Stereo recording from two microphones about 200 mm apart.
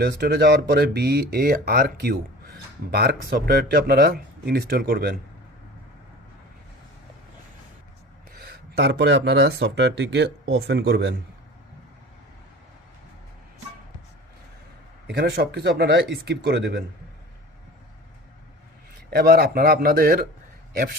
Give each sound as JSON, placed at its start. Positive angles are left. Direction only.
{"t": 0.0, "sound": "speech", "side_deg": -50}
{"t": 8.3, "sound": "speech", "side_deg": -50}
{"t": 15.0, "sound": "speech", "side_deg": -55}
{"t": 19.1, "sound": "speech", "side_deg": -50}